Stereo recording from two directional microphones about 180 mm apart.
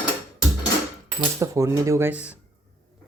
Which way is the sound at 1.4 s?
15° right (ahead or behind).